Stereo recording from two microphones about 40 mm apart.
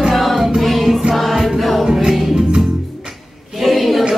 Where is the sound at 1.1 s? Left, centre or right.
Centre.